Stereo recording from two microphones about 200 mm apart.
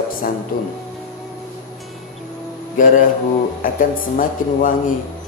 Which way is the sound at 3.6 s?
45° left (ahead or behind).